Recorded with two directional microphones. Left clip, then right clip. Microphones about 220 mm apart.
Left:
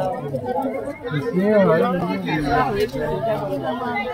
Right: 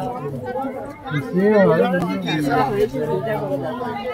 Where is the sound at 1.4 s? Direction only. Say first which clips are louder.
Right 1 dB; centre (ahead or behind).